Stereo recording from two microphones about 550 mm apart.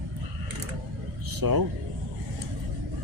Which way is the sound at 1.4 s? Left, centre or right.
Right.